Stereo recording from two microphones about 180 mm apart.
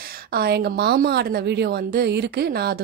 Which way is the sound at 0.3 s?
60° right (ahead or behind).